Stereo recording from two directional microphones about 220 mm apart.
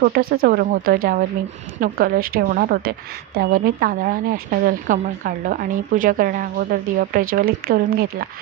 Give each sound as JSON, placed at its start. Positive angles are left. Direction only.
{"t": 0.0, "sound": "speech", "side_deg": -45}